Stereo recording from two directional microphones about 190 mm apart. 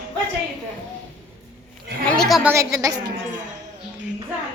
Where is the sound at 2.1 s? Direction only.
Centre (ahead or behind).